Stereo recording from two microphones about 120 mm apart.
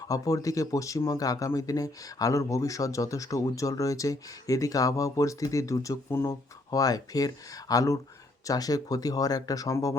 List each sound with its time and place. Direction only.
0.1 s speech: 30° left (ahead or behind)